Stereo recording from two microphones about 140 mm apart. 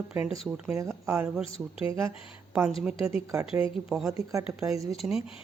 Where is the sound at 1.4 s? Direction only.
40° left (ahead or behind).